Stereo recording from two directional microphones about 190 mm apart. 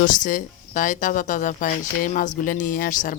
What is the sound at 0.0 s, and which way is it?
Speech, 45° left (ahead or behind).